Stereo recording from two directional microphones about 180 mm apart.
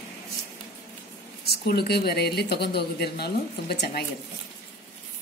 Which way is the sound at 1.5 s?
60° left (ahead or behind).